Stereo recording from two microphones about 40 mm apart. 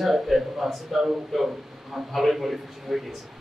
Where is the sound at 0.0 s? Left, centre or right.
Centre.